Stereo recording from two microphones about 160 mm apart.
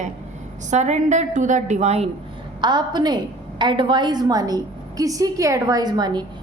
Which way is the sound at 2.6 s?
25° right (ahead or behind).